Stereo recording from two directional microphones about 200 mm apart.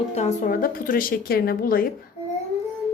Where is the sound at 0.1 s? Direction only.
35° left (ahead or behind).